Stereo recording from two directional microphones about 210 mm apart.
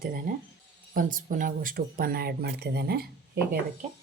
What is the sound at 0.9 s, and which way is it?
Speech, 40° right (ahead or behind).